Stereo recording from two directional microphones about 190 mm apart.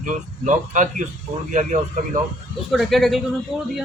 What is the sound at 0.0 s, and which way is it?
Speech, 40° right (ahead or behind).